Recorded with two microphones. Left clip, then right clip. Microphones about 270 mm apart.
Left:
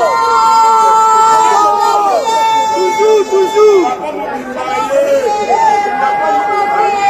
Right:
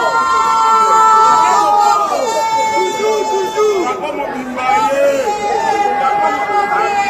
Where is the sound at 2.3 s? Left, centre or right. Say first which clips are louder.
Left 4 dB; centre.